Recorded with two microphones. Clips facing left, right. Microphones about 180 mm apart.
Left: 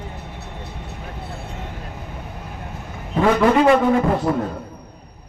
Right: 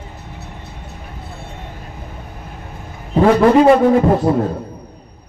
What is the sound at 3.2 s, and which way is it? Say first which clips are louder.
A man's voice: right 5 dB; 30° right (ahead or behind).